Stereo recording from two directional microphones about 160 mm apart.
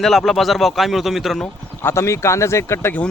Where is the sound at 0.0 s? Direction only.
Centre (ahead or behind).